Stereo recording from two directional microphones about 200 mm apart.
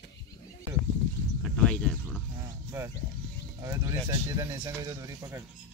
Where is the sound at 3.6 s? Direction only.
20° right (ahead or behind).